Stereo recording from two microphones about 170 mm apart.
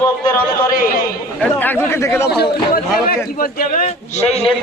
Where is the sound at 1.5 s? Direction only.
10° left (ahead or behind).